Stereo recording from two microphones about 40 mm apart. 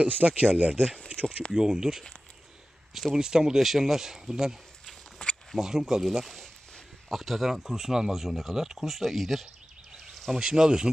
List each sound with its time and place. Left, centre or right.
0.0 s speech: right
1.1 s a sound: right
1.5 s speech: centre
3.2 s speech: centre
5.2 s a sound: left
5.5 s speech: centre
6.2 s speech: centre
10.3 s speech: centre